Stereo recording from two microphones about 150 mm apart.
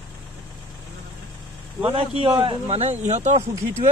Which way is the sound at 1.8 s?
40° right (ahead or behind).